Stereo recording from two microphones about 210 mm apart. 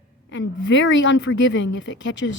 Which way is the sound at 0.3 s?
60° left (ahead or behind).